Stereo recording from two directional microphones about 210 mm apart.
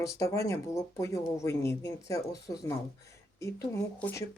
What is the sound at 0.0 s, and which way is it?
Speech, 15° left (ahead or behind).